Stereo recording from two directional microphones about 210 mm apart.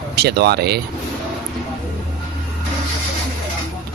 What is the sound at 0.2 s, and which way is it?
Speech, 50° right (ahead or behind).